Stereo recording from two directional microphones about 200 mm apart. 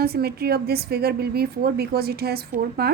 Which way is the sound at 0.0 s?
50° right (ahead or behind).